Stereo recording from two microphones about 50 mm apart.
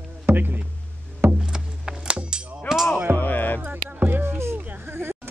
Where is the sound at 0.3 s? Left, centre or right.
Right.